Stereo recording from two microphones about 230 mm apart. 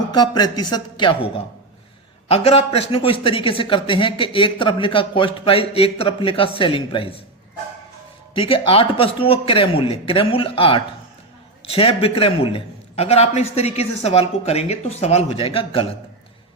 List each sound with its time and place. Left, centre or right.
0.1 s a man's voice: centre
8.4 s a man's voice: left